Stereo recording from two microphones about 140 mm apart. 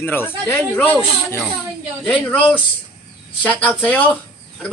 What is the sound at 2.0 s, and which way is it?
A man's voice, 10° left (ahead or behind).